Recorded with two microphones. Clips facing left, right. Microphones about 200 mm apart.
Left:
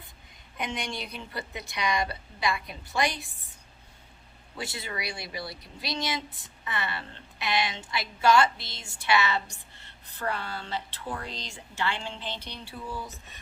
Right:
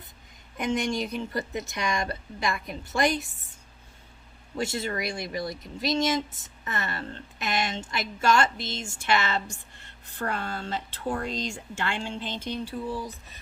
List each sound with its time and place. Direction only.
0.5 s speech: 45° right (ahead or behind)
4.5 s speech: 45° right (ahead or behind)